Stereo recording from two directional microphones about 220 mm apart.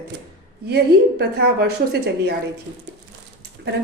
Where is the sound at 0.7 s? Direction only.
45° right (ahead or behind).